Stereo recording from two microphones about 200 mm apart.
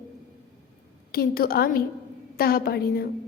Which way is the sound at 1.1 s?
50° left (ahead or behind).